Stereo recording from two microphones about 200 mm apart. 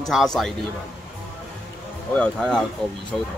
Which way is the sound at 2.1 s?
5° left (ahead or behind).